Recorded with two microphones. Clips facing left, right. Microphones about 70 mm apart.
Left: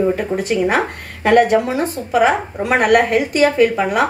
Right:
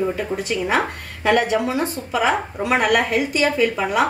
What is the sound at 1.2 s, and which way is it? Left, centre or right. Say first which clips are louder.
A woman's voice: left 5 dB; left.